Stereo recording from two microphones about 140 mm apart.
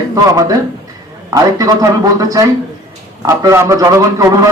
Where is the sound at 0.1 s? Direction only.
25° right (ahead or behind).